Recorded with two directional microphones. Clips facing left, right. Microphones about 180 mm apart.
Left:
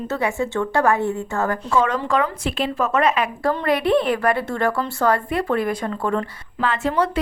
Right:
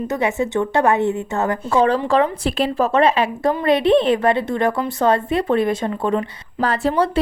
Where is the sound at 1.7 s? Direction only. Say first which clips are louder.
Right 5 dB; 35° right (ahead or behind).